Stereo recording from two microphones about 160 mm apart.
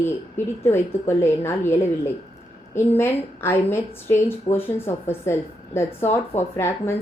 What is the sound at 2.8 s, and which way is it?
A woman's voice, 15° left (ahead or behind).